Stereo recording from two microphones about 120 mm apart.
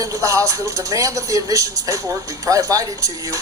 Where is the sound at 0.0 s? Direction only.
25° right (ahead or behind).